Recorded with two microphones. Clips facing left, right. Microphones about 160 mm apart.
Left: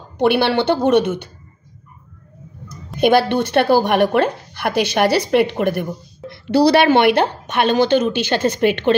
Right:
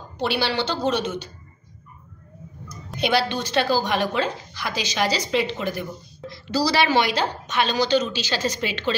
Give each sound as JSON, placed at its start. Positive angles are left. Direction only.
{"t": 0.2, "sound": "a woman's voice", "side_deg": 60}
{"t": 3.0, "sound": "a woman's voice", "side_deg": 50}